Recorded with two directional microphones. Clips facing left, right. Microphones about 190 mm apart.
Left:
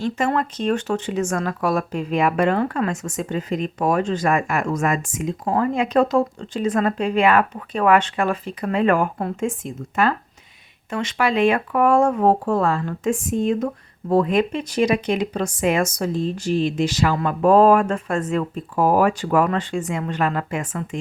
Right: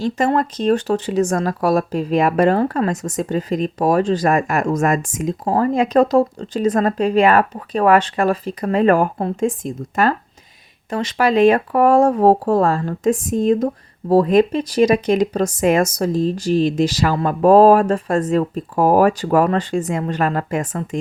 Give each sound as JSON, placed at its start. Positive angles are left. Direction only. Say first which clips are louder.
{"t": 0.0, "sound": "speech", "louder": "right 4 dB", "side_deg": -35}